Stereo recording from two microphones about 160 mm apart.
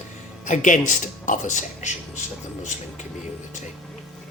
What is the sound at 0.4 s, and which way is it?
Speech, 50° left (ahead or behind).